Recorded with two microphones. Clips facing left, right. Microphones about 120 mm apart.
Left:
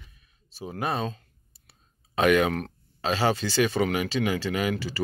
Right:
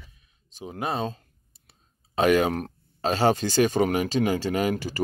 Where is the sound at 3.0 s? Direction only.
45° right (ahead or behind).